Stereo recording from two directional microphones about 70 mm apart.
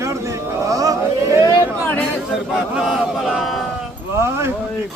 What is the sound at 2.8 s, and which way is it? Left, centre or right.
Speech, centre.